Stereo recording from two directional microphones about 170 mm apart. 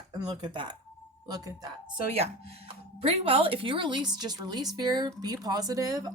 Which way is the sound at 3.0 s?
35° right (ahead or behind).